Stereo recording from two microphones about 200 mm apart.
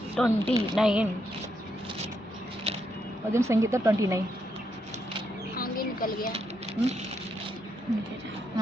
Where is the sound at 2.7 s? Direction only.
30° right (ahead or behind).